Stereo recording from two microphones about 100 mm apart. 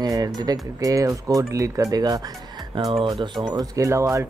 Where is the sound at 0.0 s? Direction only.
40° right (ahead or behind).